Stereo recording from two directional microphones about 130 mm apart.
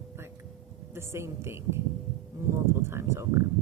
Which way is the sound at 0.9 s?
20° right (ahead or behind).